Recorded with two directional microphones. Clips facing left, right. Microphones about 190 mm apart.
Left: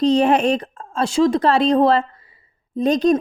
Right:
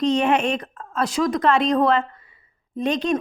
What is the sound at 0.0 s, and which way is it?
Speech, 35° left (ahead or behind).